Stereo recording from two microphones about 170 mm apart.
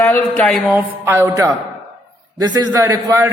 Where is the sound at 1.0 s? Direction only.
15° right (ahead or behind).